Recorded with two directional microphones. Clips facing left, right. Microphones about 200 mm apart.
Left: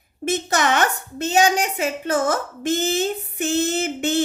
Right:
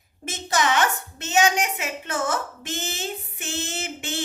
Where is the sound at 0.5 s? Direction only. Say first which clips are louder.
Left 1 dB; 55° left (ahead or behind).